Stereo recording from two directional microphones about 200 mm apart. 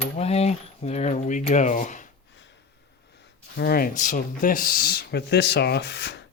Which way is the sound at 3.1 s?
60° left (ahead or behind).